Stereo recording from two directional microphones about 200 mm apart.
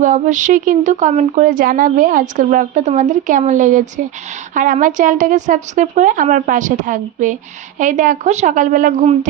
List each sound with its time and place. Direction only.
0.0 s speech: 40° right (ahead or behind)